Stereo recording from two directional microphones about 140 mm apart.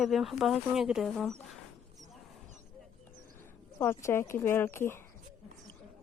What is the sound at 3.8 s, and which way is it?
Speech, 15° left (ahead or behind).